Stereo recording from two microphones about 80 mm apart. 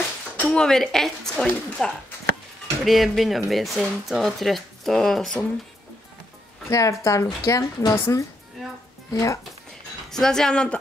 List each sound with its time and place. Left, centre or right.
0.4 s a woman's voice: centre
2.8 s speech: centre
6.7 s a woman's voice: left
10.0 s a woman's voice: centre